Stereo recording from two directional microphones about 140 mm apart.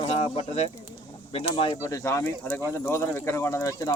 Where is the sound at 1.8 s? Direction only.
20° left (ahead or behind).